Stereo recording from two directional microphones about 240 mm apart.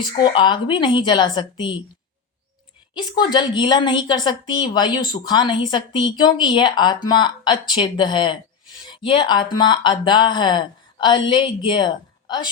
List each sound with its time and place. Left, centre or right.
0.0 s a woman's voice: centre
2.9 s a woman's voice: centre